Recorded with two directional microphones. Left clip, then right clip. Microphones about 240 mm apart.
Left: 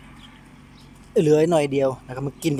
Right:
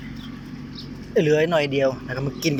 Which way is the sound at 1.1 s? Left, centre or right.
Centre.